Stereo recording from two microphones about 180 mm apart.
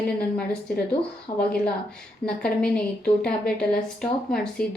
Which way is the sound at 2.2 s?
5° left (ahead or behind).